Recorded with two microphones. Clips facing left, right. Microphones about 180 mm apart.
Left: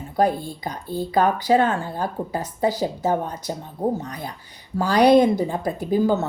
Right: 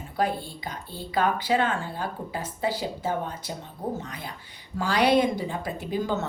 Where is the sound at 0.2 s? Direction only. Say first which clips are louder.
Left 6 dB; 40° left (ahead or behind).